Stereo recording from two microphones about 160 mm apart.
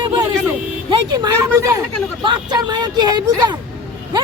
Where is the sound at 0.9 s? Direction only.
25° right (ahead or behind).